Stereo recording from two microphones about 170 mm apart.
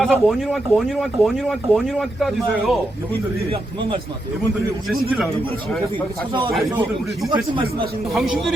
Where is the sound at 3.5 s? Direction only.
30° right (ahead or behind).